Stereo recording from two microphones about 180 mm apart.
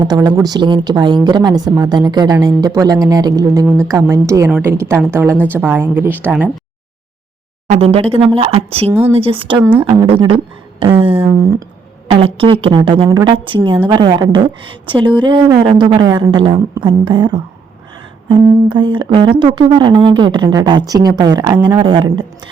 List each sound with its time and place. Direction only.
0.0 s a woman's voice: 25° right (ahead or behind)
7.7 s a woman's voice: 35° right (ahead or behind)
8.9 s a woman's voice: 10° right (ahead or behind)
9.1 s a woman's voice: 30° right (ahead or behind)
11.3 s a woman's voice: 15° right (ahead or behind)
12.0 s a woman's voice: 30° right (ahead or behind)